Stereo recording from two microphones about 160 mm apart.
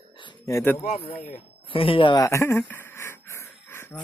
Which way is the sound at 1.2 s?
40° left (ahead or behind).